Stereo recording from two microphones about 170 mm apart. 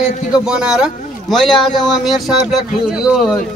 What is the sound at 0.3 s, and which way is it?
A man's voice, 5° right (ahead or behind).